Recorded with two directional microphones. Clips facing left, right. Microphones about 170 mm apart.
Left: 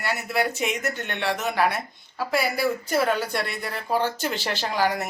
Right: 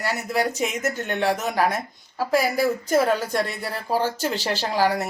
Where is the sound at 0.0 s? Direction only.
40° right (ahead or behind).